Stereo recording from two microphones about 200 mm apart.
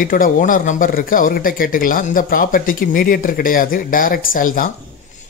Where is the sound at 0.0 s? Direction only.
45° left (ahead or behind).